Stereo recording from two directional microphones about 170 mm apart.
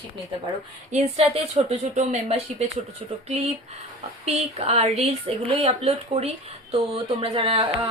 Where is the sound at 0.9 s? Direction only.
40° right (ahead or behind).